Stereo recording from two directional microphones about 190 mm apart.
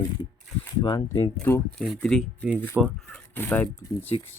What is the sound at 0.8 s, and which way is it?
Speech, 20° left (ahead or behind).